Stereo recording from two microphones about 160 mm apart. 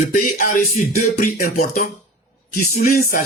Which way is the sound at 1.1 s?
65° left (ahead or behind).